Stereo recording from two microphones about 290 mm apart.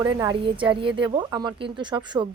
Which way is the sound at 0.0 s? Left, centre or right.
Centre.